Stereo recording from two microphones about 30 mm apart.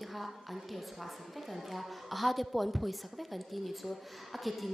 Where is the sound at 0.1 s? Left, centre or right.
Centre.